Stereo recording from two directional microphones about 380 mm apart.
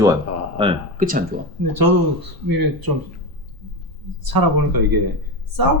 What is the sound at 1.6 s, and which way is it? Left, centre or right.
Speech, right.